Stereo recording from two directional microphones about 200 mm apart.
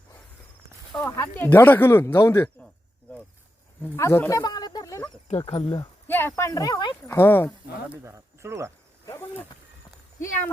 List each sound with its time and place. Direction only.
0.9 s speech: 15° left (ahead or behind)
3.8 s speech: 15° left (ahead or behind)
6.1 s speech: 10° left (ahead or behind)
7.9 s speech: 15° right (ahead or behind)
9.0 s a sound: 15° left (ahead or behind)